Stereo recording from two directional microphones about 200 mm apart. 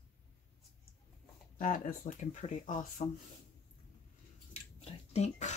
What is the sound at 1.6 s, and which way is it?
Speech, 40° left (ahead or behind).